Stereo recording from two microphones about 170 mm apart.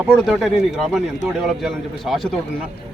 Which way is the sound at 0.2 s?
Centre (ahead or behind).